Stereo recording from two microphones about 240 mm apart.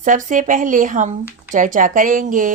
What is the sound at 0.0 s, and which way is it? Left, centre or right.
Speech, right.